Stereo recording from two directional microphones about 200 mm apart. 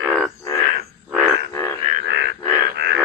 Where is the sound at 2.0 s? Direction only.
60° right (ahead or behind).